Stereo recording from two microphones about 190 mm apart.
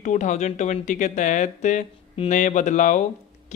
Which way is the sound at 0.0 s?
40° left (ahead or behind).